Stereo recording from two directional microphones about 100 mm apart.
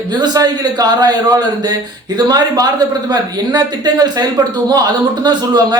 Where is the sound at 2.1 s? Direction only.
40° right (ahead or behind).